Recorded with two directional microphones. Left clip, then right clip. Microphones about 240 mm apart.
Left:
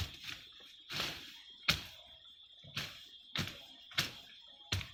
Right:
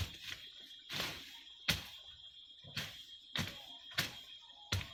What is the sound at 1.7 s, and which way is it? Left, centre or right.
Music, centre.